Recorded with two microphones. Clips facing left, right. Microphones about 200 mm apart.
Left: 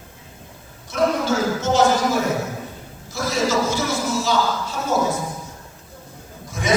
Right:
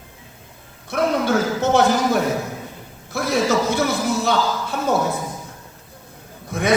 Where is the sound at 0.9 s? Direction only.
60° right (ahead or behind).